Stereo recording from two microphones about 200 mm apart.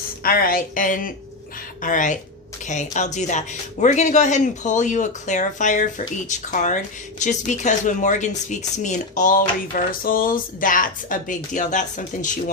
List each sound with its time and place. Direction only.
0.2 s a woman's voice: 45° left (ahead or behind)